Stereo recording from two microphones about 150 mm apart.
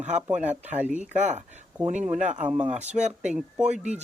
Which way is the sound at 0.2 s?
10° right (ahead or behind).